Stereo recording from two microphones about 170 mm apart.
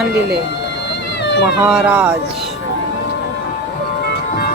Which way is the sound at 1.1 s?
80° left.